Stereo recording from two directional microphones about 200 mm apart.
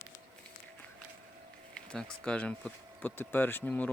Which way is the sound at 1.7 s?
5° left (ahead or behind).